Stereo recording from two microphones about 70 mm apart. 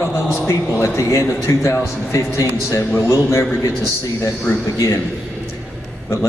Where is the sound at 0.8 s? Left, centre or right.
Left.